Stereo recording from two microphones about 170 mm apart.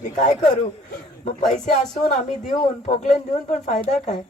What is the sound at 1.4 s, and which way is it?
Speech, 45° left (ahead or behind).